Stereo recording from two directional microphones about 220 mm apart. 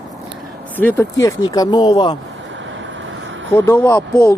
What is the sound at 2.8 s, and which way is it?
Vehicle, 60° right (ahead or behind).